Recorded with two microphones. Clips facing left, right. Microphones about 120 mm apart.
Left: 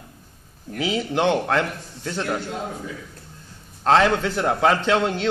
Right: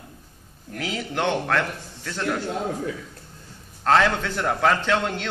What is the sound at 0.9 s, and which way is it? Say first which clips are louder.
A man's voice: left 4 dB; 20° left (ahead or behind).